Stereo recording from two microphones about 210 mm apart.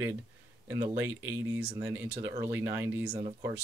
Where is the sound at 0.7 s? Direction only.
10° right (ahead or behind).